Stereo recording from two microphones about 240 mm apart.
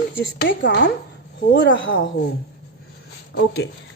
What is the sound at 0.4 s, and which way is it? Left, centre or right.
Speech, left.